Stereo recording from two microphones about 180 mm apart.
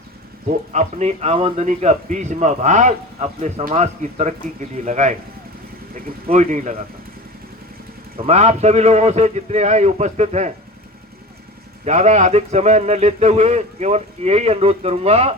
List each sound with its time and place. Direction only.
0.7 s a man's voice: 40° right (ahead or behind)
8.2 s a man's voice: 35° right (ahead or behind)
11.9 s a man's voice: 40° right (ahead or behind)